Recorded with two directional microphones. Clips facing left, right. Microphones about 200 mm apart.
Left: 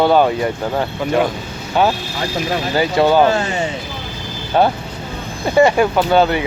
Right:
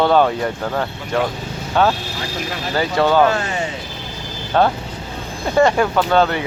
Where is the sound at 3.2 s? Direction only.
30° left (ahead or behind).